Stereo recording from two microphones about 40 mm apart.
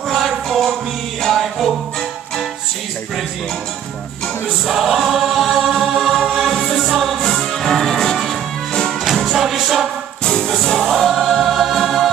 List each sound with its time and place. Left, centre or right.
0.1 s music: centre
4.6 s choir: centre
7.2 s music: centre
9.0 s music: centre
10.2 s choir: centre
10.6 s music: centre
11.0 s choir: centre